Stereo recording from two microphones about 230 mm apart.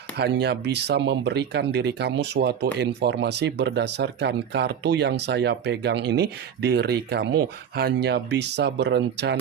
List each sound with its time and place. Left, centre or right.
0.2 s speech: right